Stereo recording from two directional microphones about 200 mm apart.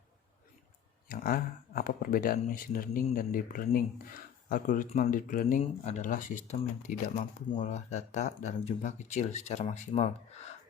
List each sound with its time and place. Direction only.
1.0 s speech: 45° left (ahead or behind)